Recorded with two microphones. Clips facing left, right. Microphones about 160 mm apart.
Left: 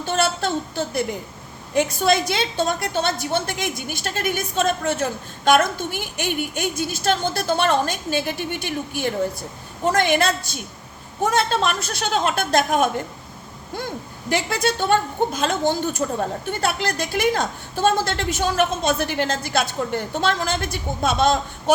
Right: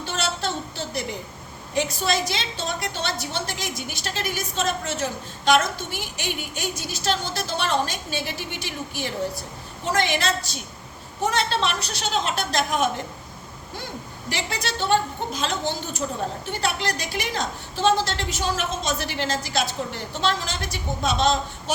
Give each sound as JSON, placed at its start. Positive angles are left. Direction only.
{"t": 0.0, "sound": "a sound", "side_deg": 50}
{"t": 1.7, "sound": "a woman's voice", "side_deg": 55}
{"t": 14.3, "sound": "a woman's voice", "side_deg": 50}